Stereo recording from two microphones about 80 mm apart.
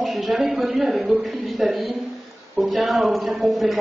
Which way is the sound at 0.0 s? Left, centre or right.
Centre.